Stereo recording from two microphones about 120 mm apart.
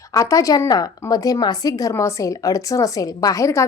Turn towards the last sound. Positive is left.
turn(degrees=25)  # may be behind; listen again after turning